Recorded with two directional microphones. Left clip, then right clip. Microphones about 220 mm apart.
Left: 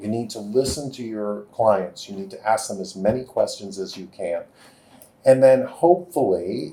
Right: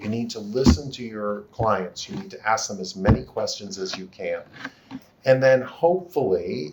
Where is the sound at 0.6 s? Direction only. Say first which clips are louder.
Right 1 dB; 45° right (ahead or behind).